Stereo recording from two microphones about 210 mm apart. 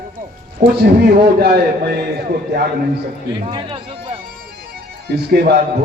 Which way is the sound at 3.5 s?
25° right (ahead or behind).